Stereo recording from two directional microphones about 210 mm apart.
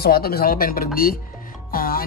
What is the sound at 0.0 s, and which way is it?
Music, 45° left (ahead or behind).